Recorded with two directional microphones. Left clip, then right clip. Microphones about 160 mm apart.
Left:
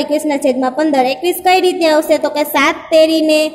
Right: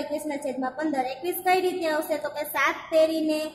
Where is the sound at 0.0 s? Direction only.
35° left (ahead or behind).